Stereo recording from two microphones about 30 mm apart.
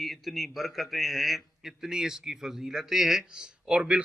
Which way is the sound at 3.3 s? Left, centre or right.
Right.